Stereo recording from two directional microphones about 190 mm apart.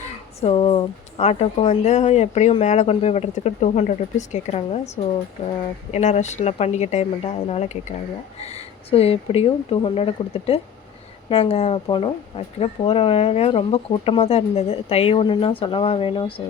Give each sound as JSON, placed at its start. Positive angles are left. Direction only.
{"t": 0.4, "sound": "speech", "side_deg": 25}